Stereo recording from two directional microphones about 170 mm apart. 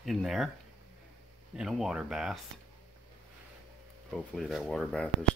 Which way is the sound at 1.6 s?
5° right (ahead or behind).